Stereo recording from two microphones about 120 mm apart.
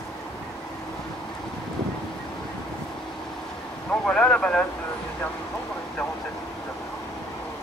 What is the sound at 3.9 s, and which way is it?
Vehicle, 10° left (ahead or behind).